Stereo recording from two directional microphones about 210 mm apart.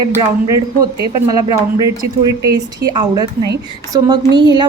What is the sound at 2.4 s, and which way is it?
A man's voice, 15° right (ahead or behind).